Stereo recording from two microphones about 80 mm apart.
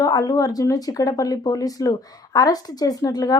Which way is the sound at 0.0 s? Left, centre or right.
Left.